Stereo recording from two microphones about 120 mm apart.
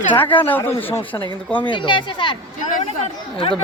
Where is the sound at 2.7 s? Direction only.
65° left (ahead or behind).